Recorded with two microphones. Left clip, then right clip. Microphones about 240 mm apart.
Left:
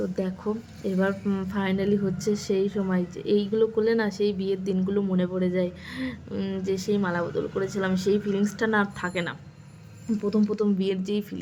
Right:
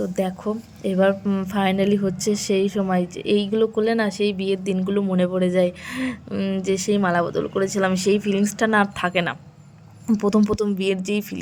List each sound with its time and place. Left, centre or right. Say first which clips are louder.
0.0 s a woman's voice: right 5 dB; centre